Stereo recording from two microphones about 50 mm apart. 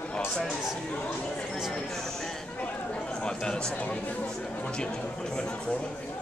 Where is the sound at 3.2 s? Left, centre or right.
Centre.